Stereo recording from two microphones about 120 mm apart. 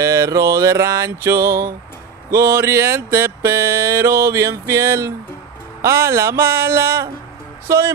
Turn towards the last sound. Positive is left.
turn(degrees=-25)  # may be behind; listen again after turning